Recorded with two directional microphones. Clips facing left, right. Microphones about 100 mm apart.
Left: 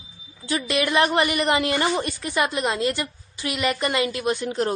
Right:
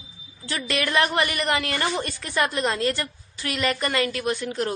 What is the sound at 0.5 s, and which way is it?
A woman's voice, 20° left (ahead or behind).